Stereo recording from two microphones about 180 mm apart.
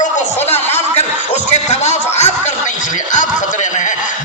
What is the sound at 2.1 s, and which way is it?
Chuckle, 40° left (ahead or behind).